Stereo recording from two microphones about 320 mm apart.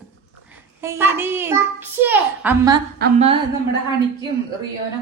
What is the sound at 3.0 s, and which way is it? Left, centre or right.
Humming, centre.